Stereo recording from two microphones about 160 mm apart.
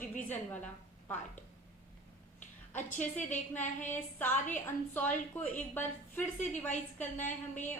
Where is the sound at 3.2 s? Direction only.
50° left (ahead or behind).